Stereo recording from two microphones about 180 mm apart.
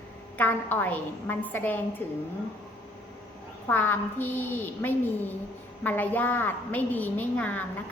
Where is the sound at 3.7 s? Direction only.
10° left (ahead or behind).